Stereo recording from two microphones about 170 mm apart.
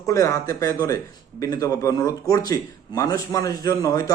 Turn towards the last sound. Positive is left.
turn(degrees=20)  # may be behind; listen again after turning